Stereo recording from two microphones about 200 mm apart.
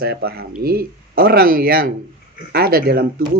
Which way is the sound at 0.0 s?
50° right (ahead or behind).